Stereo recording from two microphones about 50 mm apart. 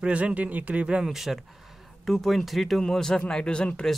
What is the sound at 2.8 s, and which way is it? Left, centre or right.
Speech, centre.